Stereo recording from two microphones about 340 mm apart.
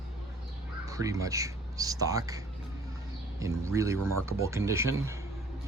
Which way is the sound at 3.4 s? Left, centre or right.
Centre.